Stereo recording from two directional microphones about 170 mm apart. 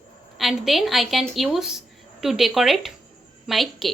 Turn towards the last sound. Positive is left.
turn(degrees=0)  # may be behind; listen again after turning